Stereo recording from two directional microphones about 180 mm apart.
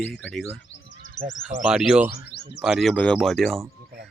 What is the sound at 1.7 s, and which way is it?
Speech, 5° right (ahead or behind).